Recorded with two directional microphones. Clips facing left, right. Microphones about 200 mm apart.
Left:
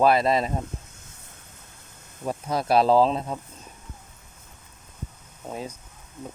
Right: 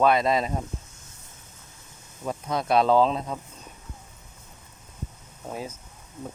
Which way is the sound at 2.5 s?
30° left (ahead or behind).